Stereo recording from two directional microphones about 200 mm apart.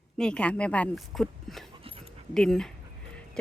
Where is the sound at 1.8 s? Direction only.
30° right (ahead or behind).